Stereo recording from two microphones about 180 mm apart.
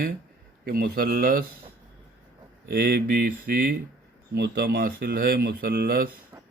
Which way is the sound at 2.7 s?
55° right (ahead or behind).